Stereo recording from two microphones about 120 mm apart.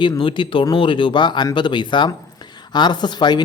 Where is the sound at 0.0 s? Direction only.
45° left (ahead or behind).